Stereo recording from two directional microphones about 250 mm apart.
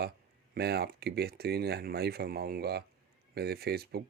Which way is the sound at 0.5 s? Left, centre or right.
Right.